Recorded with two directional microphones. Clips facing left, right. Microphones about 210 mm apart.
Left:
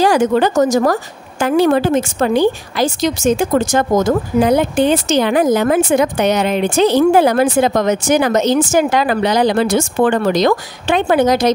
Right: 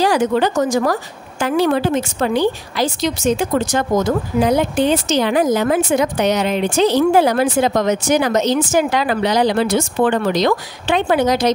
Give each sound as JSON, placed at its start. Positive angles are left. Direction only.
{"t": 0.0, "sound": "a woman's voice", "side_deg": 45}